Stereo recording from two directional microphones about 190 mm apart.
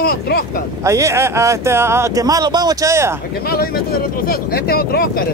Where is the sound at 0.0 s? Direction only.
55° left (ahead or behind).